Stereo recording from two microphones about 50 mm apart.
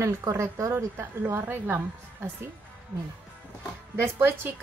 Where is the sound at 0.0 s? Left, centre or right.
Right.